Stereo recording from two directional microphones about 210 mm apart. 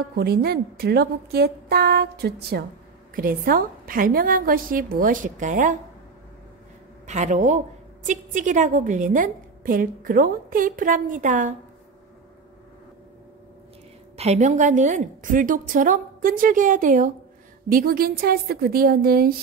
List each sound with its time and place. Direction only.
0.1 s a woman's voice: 50° right (ahead or behind)
7.1 s a woman's voice: 35° right (ahead or behind)
14.1 s a woman's voice: 30° right (ahead or behind)